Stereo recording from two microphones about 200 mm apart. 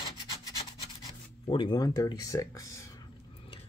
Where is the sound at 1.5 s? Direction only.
25° left (ahead or behind).